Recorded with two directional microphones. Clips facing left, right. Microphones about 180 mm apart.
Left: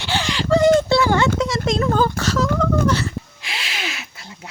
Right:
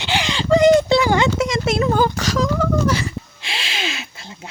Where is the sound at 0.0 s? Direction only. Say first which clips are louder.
Right 1 dB; 15° right (ahead or behind).